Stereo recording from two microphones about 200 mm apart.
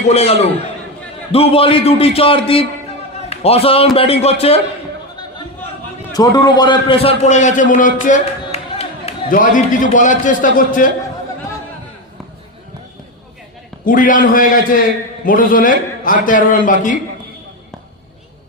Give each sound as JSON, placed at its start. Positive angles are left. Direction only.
{"t": 0.1, "sound": "a man's voice", "side_deg": 30}
{"t": 6.1, "sound": "a man's voice", "side_deg": 20}
{"t": 9.3, "sound": "a man's voice", "side_deg": 40}
{"t": 13.8, "sound": "a man's voice", "side_deg": 40}